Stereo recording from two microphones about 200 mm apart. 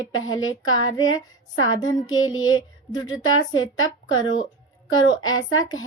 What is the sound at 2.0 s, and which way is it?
Music, 20° left (ahead or behind).